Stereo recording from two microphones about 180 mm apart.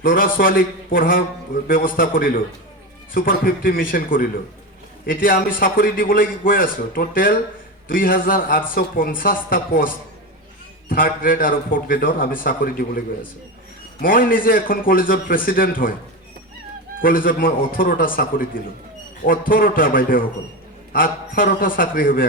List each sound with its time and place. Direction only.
0.0 s a man's voice: 50° left (ahead or behind)
14.0 s a man's voice: 50° left (ahead or behind)
17.0 s a man's voice: 50° left (ahead or behind)